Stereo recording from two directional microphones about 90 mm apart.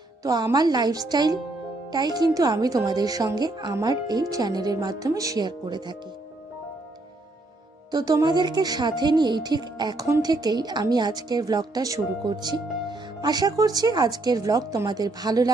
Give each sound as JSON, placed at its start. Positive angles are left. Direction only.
{"t": 0.2, "sound": "a woman's voice", "side_deg": -45}
{"t": 5.5, "sound": "speech", "side_deg": -55}
{"t": 7.9, "sound": "a woman's voice", "side_deg": -45}